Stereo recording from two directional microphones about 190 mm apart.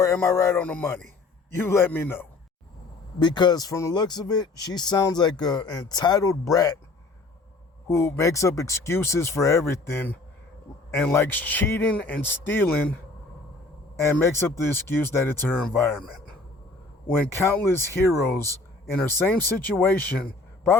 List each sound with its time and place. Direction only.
0.0 s speech: 15° left (ahead or behind)
3.2 s speech: 25° left (ahead or behind)
7.9 s speech: 15° left (ahead or behind)
14.0 s speech: 15° left (ahead or behind)